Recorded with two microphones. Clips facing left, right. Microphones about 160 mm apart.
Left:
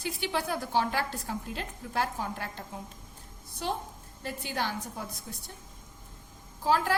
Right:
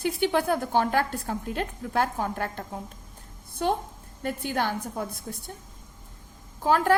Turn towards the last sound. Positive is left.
turn(degrees=-55)  # may be behind; listen again after turning